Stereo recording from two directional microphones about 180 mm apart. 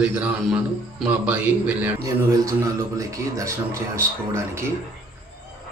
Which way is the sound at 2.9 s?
20° right (ahead or behind).